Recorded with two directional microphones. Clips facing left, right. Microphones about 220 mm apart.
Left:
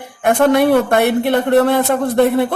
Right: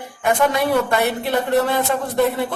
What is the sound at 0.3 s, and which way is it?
A woman's voice, 60° left (ahead or behind).